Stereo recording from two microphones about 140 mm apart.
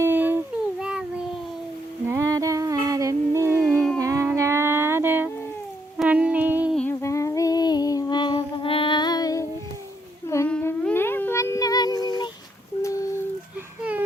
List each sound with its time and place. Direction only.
0.0 s a sound: 15° right (ahead or behind)
2.0 s humming: 20° right (ahead or behind)
3.6 s music: 5° left (ahead or behind)
4.0 s humming: 20° right (ahead or behind)
4.4 s a sound: 20° right (ahead or behind)
6.9 s female singing: 20° left (ahead or behind)
10.2 s humming: 20° left (ahead or behind)